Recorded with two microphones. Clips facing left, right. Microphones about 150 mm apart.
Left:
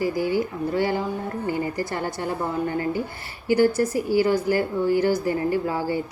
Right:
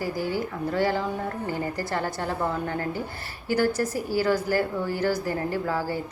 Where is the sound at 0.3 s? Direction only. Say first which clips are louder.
Left 4 dB; 50° right (ahead or behind).